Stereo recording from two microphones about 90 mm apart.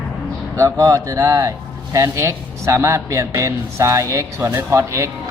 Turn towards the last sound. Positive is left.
turn(degrees=-35)  # may be behind; listen again after turning